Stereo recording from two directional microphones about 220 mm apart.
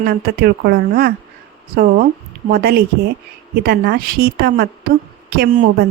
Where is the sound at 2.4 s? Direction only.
45° right (ahead or behind).